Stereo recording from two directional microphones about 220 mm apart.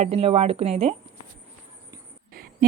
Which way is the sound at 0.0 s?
25° right (ahead or behind).